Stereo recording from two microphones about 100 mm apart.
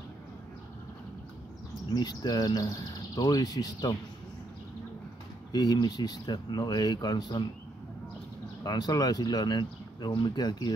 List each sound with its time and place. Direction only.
1.9 s speech: 40° left (ahead or behind)
5.5 s speech: 45° left (ahead or behind)
8.6 s speech: 45° left (ahead or behind)